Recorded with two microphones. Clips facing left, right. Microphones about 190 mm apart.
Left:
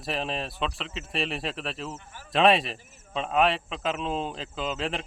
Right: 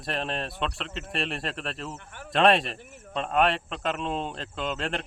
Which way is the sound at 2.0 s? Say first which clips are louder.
Right 4 dB; 65° right (ahead or behind).